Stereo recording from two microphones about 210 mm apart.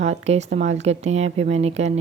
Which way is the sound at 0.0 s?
35° right (ahead or behind).